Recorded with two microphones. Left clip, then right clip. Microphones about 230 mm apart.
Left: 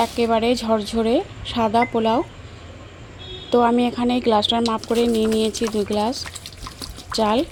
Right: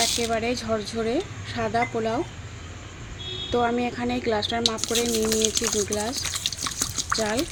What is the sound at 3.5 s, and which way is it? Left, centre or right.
Speech, left.